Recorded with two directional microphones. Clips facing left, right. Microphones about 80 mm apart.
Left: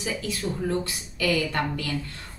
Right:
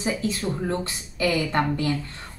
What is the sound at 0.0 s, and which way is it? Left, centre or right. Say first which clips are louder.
A woman's voice: right 4 dB; right.